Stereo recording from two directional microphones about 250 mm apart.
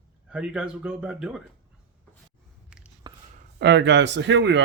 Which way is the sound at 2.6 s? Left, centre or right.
Centre.